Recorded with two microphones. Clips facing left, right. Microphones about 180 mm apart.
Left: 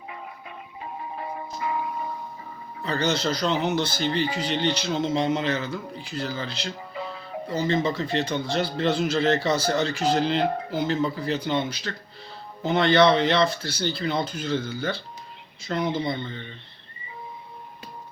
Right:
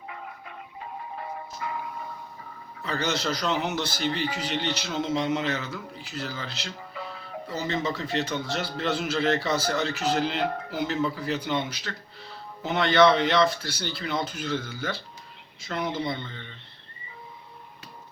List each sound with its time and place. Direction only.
1.1 s music: 20° left (ahead or behind)
2.8 s speech: 30° left (ahead or behind)
6.1 s music: 35° left (ahead or behind)
7.7 s speech: 30° left (ahead or behind)
8.0 s speech: 5° right (ahead or behind)
8.5 s speech: 30° left (ahead or behind)